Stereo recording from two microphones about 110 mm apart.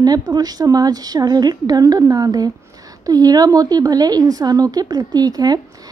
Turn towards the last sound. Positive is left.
turn(degrees=-35)  # may be behind; listen again after turning